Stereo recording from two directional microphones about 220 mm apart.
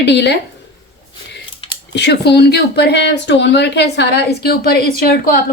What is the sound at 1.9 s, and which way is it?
Speech, 50° left (ahead or behind).